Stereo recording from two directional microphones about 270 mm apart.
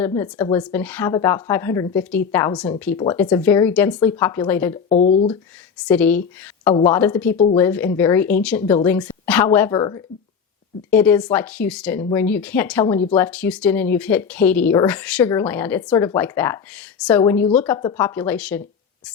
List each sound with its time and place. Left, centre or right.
0.0 s speech: centre
4.9 s speech: left
5.8 s speech: centre